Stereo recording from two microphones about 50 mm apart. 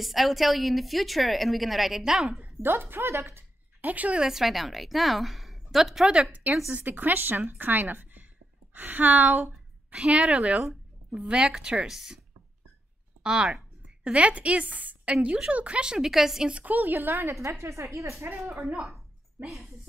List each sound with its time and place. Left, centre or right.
0.0 s a woman's voice: centre
2.6 s a woman's voice: right
3.8 s a woman's voice: right
4.2 s a woman's voice: centre
6.7 s a woman's voice: right
9.8 s a woman's voice: right
13.2 s a woman's voice: centre
16.4 s a woman's voice: right
16.8 s a woman's voice: right
17.3 s a woman's voice: right
19.4 s a woman's voice: centre